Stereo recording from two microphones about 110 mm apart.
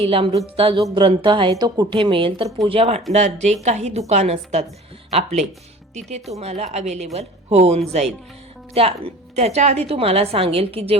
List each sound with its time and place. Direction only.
0.0 s a woman's voice: 60° right (ahead or behind)
2.6 s a woman's voice: 60° right (ahead or behind); by 4.6 s 80° right
5.1 s speech: 90° right
6.4 s a woman's voice: 75° right (ahead or behind)
9.3 s a woman's voice: 75° right (ahead or behind); by 10.9 s 60° right (ahead or behind)